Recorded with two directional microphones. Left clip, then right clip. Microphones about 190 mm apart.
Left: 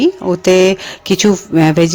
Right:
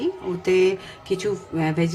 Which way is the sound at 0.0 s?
40° left (ahead or behind).